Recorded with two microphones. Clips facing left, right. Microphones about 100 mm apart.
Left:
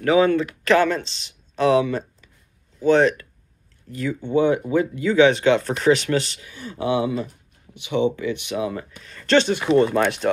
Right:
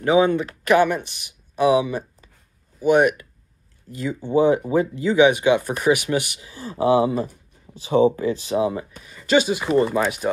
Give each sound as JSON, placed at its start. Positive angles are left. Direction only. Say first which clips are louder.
{"t": 0.0, "sound": "speech", "louder": "even", "side_deg": -20}
{"t": 5.1, "sound": "speech", "louder": "even", "side_deg": -15}
{"t": 6.4, "sound": "speech", "louder": "right 5 dB", "side_deg": -30}
{"t": 9.0, "sound": "speech", "louder": "left 1 dB", "side_deg": -10}